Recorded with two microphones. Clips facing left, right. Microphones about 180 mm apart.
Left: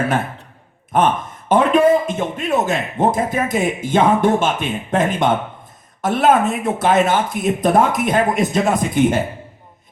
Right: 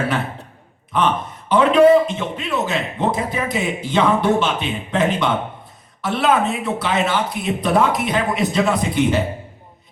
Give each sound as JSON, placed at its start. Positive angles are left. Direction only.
{"t": 0.9, "sound": "a man's voice", "side_deg": 45}